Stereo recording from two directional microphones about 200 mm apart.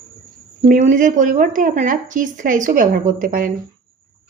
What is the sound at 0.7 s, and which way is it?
Speech, 40° right (ahead or behind).